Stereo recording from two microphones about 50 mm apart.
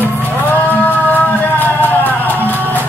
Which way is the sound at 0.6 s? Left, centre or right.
Left.